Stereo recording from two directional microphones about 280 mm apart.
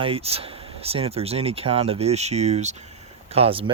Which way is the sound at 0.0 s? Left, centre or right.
Right.